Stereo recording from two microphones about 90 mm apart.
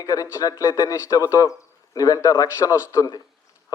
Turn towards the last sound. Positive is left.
turn(degrees=35)  # may be behind; listen again after turning